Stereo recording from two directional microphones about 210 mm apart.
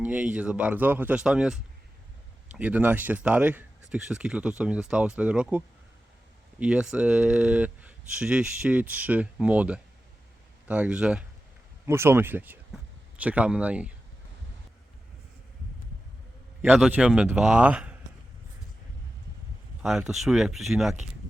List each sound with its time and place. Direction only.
0.0 s speech: 5° right (ahead or behind)
16.6 s speech: 5° right (ahead or behind)
19.8 s speech: centre (ahead or behind)